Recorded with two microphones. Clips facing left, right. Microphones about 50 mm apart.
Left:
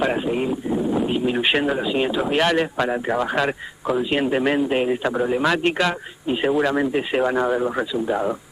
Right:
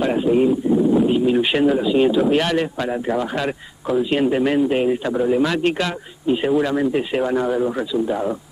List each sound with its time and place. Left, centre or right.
0.0 s speech: centre